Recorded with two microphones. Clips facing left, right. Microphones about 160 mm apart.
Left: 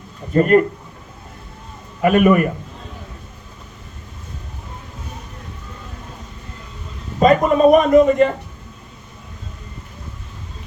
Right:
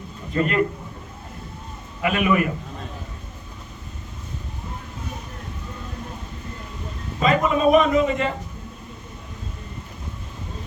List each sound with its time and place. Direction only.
0.3 s a man's voice: 45° left (ahead or behind)
2.0 s a man's voice: 45° left (ahead or behind)
7.2 s a man's voice: 45° left (ahead or behind)